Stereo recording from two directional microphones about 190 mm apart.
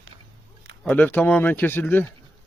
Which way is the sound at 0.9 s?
10° left (ahead or behind).